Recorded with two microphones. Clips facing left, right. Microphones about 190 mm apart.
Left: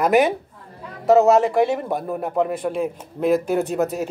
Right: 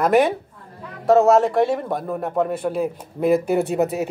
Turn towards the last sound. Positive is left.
turn(degrees=-15)  # may be behind; listen again after turning